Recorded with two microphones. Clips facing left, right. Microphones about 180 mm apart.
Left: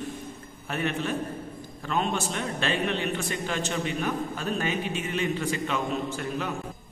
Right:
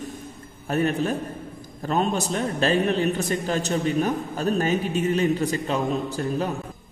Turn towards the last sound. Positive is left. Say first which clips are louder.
# right 4 dB
turn(degrees=-40)  # may be behind; listen again after turning